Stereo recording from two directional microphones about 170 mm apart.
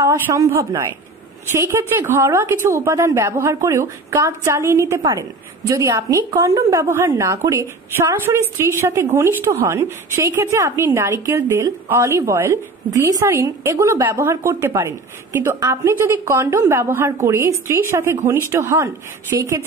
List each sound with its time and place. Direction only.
0.0 s a woman's voice: 20° right (ahead or behind)